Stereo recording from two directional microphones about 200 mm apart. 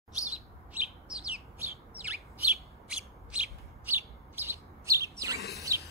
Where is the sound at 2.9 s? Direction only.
5° right (ahead or behind).